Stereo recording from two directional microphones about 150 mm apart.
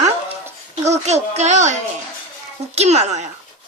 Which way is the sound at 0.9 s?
50° right (ahead or behind).